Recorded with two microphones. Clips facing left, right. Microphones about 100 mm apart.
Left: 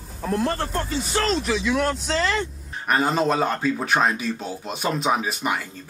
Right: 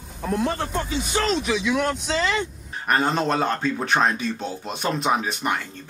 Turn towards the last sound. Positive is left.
turn(degrees=0)  # may be behind; listen again after turning